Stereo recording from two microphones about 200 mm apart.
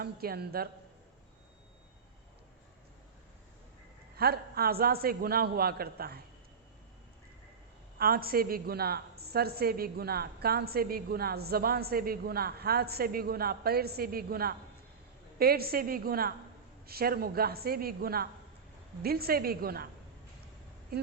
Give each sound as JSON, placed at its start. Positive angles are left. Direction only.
{"t": 0.0, "sound": "a woman's voice", "side_deg": -50}
{"t": 4.2, "sound": "a woman's voice", "side_deg": -50}
{"t": 7.9, "sound": "a woman's voice", "side_deg": -50}
{"t": 20.9, "sound": "a sound", "side_deg": -50}